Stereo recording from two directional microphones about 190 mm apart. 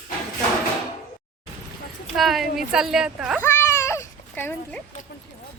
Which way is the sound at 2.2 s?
Centre (ahead or behind).